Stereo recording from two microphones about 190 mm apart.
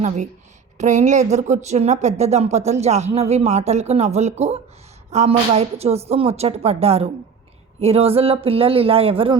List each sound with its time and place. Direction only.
0.8 s speech: 40° right (ahead or behind)